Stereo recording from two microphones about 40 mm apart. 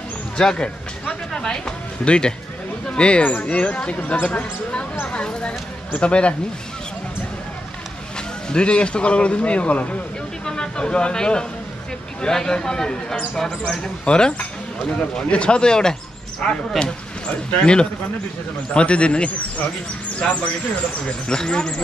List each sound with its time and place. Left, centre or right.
0.4 s a man's voice: centre
1.3 s a sound: centre
2.0 s a man's voice: left
8.5 s a man's voice: left
10.4 s speech: centre
13.3 s speech: centre
14.0 s speech: left
17.5 s a man's voice: left
21.3 s a man's voice: centre